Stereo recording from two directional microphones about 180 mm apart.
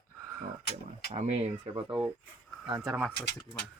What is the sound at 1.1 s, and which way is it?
Speech, 35° right (ahead or behind).